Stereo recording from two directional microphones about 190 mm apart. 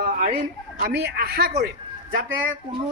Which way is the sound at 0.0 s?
50° right (ahead or behind).